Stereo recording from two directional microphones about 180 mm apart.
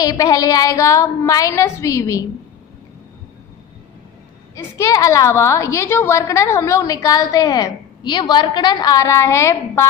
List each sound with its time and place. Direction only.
0.0 s a woman's voice: 20° left (ahead or behind)
4.5 s a woman's voice: 15° left (ahead or behind)